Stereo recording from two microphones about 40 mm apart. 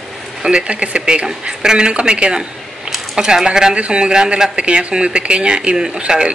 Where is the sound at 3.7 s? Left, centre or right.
Right.